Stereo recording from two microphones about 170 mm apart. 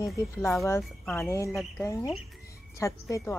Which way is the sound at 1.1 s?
15° left (ahead or behind).